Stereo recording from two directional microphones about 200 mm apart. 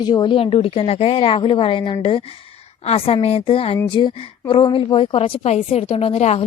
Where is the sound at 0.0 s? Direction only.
20° left (ahead or behind).